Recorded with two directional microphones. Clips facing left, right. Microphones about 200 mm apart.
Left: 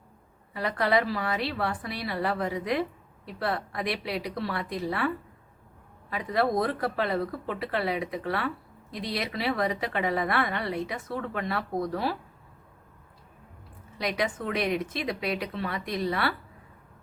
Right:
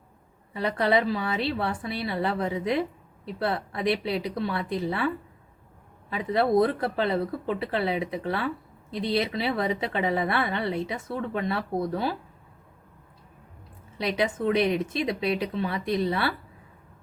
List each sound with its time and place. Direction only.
0.5 s a woman's voice: 25° right (ahead or behind)
14.0 s a woman's voice: 25° right (ahead or behind)